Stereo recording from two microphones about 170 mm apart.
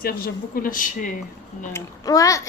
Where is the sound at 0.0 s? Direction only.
60° left (ahead or behind).